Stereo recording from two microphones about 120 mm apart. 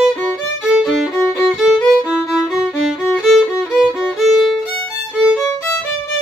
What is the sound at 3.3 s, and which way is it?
Violin, centre (ahead or behind).